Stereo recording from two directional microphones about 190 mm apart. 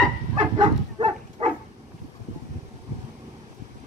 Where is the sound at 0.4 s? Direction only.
25° right (ahead or behind).